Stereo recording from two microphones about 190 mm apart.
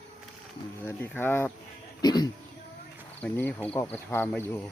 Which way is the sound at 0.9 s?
10° left (ahead or behind).